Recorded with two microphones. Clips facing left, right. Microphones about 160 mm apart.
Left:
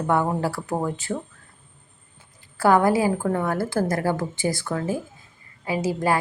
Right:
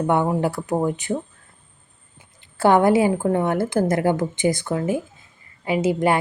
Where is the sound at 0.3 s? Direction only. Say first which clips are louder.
Right 3 dB; 20° right (ahead or behind).